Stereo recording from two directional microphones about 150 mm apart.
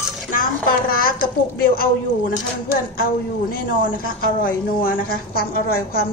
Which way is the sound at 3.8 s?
70° left (ahead or behind).